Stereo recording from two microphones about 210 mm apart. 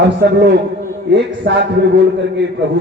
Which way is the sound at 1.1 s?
55° right (ahead or behind).